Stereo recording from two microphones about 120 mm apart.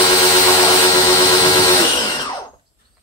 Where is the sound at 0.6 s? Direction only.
30° left (ahead or behind).